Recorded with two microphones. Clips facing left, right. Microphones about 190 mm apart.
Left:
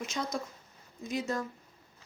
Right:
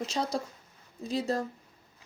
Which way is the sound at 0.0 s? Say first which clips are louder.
Right 4 dB; 35° right (ahead or behind).